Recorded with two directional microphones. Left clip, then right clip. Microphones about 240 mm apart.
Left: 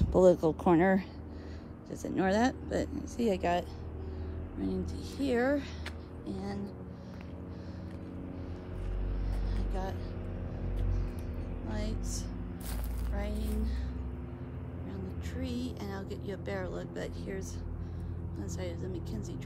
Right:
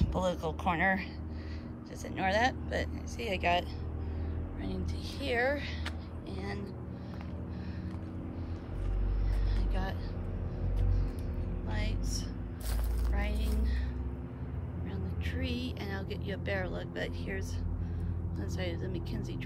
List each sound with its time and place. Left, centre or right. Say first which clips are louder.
0.0 s speech: left 9 dB; left
2.1 s speech: even; left
13.1 s music: even; centre
15.4 s speech: even; centre
18.6 s speech: right 2 dB; centre